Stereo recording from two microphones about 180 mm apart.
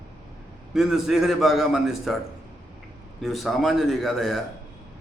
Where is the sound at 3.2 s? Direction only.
Centre (ahead or behind).